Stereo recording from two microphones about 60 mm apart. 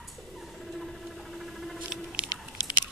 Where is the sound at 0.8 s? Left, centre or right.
Centre.